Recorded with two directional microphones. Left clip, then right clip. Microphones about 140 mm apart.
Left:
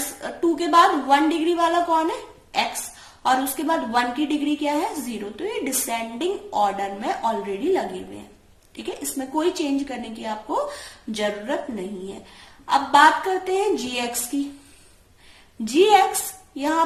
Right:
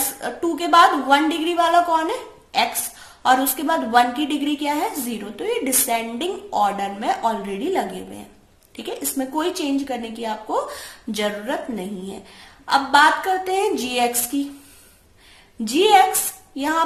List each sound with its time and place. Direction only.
0.2 s a woman's voice: 40° right (ahead or behind)
15.6 s a woman's voice: 40° right (ahead or behind)